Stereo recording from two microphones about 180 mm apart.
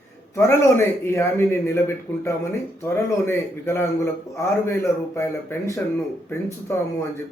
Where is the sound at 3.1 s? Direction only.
15° left (ahead or behind).